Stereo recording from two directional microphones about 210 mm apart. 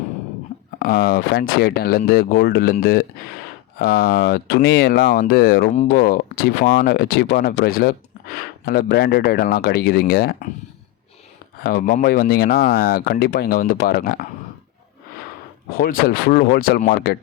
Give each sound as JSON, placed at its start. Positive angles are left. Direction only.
{"t": 0.8, "sound": "speech", "side_deg": 45}
{"t": 3.8, "sound": "speech", "side_deg": 50}
{"t": 11.6, "sound": "speech", "side_deg": 45}
{"t": 15.7, "sound": "speech", "side_deg": 45}